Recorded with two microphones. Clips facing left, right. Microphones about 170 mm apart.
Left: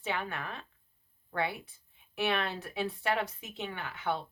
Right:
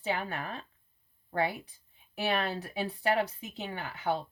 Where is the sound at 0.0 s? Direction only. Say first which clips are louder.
Right 2 dB; 35° right (ahead or behind).